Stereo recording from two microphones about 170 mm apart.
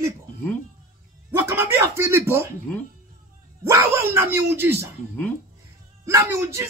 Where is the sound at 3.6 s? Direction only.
15° right (ahead or behind).